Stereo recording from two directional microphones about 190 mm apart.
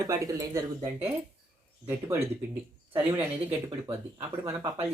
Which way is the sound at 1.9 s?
15° right (ahead or behind).